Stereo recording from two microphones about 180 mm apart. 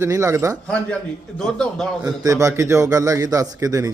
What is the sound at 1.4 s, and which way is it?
Speech, 5° left (ahead or behind).